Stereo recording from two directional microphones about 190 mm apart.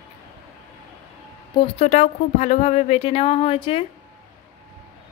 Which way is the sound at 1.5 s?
30° left (ahead or behind).